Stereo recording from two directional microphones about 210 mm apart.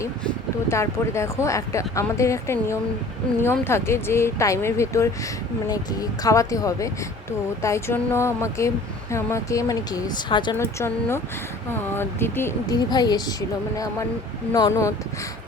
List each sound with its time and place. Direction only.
0.7 s speech: 15° left (ahead or behind)
14.5 s speech: 15° left (ahead or behind)